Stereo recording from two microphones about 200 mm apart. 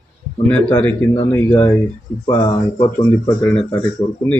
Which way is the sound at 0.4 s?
5° left (ahead or behind).